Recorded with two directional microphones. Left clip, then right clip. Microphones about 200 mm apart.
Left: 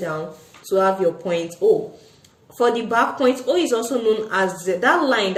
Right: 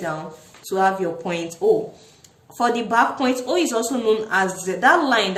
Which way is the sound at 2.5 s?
30° right (ahead or behind).